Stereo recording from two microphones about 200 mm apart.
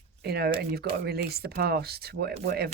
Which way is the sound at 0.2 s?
55° right (ahead or behind).